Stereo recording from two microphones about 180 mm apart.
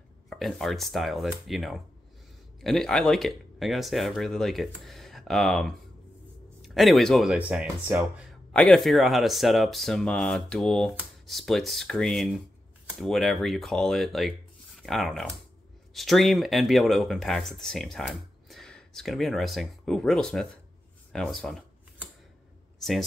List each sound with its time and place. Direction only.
0.3 s speech: centre (ahead or behind)
21.1 s a sound: 5° left (ahead or behind)
22.8 s speech: centre (ahead or behind)